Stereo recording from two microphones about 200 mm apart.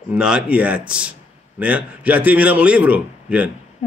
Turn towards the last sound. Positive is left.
turn(degrees=-5)  # may be behind; listen again after turning